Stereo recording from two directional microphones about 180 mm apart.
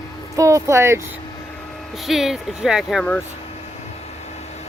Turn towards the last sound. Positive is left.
turn(degrees=5)  # may be behind; listen again after turning